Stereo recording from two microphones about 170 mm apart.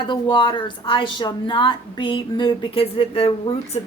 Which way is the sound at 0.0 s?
30° left (ahead or behind).